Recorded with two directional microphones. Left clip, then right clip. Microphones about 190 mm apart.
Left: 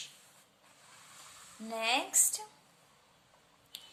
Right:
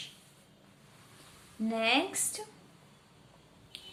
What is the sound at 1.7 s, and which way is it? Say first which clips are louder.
Speech: right 2 dB; 25° left (ahead or behind).